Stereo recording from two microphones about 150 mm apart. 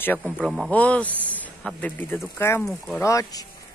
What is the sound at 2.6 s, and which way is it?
Speech, centre (ahead or behind).